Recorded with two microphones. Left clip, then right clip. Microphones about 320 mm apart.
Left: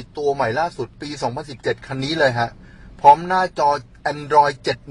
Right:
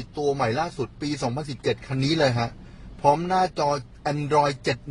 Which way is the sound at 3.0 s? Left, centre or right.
Left.